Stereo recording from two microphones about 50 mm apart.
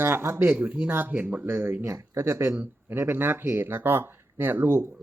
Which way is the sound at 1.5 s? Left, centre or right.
Right.